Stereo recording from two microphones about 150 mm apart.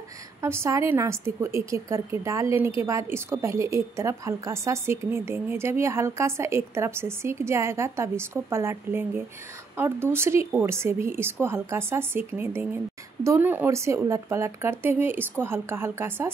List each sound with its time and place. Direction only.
0.4 s a woman's voice: 20° right (ahead or behind)